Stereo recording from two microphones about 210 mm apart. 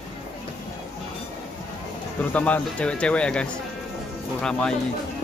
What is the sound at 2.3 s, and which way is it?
Speech, 5° left (ahead or behind).